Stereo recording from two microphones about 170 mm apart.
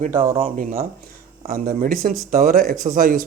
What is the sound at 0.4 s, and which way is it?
Speech, 55° right (ahead or behind).